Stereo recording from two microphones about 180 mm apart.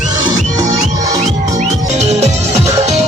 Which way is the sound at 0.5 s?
20° right (ahead or behind).